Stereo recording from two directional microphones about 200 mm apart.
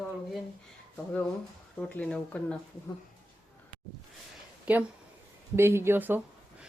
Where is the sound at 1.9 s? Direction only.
5° left (ahead or behind).